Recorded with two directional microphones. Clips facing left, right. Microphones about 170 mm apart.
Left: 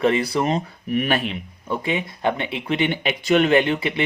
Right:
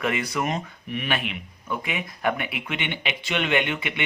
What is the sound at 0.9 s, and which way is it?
Speech, 40° left (ahead or behind).